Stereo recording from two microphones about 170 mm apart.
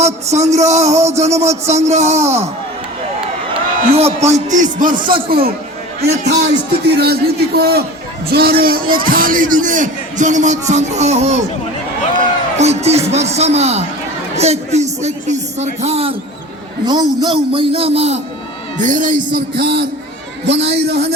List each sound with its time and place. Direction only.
0.0 s a man's voice: 40° right (ahead or behind); by 5.5 s 60° right (ahead or behind)
6.0 s a man's voice: 75° right (ahead or behind); by 11.3 s 40° right (ahead or behind)
12.5 s a man's voice: 40° right (ahead or behind)
16.8 s a man's voice: 25° right (ahead or behind)
18.8 s a man's voice: 50° right (ahead or behind)
19.5 s a man's voice: 75° right (ahead or behind)